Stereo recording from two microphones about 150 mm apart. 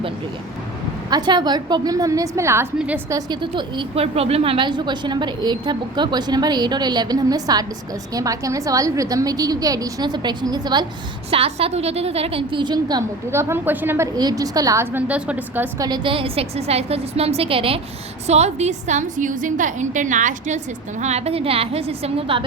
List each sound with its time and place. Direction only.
1.1 s a woman's voice: 30° right (ahead or behind); by 3.0 s 10° right (ahead or behind)
3.1 s a woman's voice: 25° right (ahead or behind)
11.3 s a woman's voice: 40° right (ahead or behind); by 14.1 s 15° right (ahead or behind)
14.2 s a woman's voice: 25° right (ahead or behind)
15.8 s a woman's voice: 30° right (ahead or behind); by 20.6 s 55° right (ahead or behind)
21.0 s a woman's voice: 45° right (ahead or behind)